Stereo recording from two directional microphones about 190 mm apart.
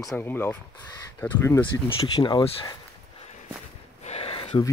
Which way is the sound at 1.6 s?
25° left (ahead or behind).